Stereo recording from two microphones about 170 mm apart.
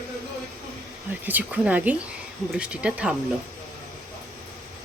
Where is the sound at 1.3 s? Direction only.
10° right (ahead or behind).